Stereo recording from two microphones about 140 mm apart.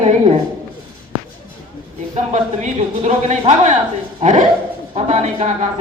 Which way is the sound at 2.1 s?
60° right (ahead or behind).